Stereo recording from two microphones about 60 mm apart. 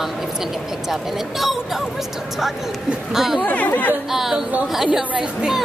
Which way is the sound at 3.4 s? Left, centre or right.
Left.